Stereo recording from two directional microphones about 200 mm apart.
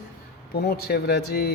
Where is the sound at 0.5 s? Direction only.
50° left (ahead or behind).